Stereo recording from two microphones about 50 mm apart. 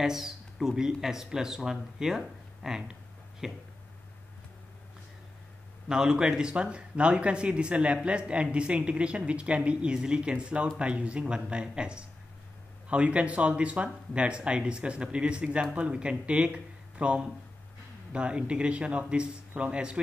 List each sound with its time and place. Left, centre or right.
0.0 s speech: centre
5.9 s speech: centre